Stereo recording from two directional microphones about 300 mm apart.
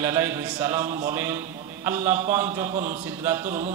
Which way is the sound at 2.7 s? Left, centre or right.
Right.